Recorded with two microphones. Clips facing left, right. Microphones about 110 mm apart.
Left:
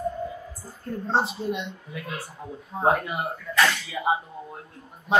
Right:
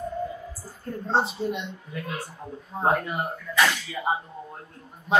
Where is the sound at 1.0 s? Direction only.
Centre (ahead or behind).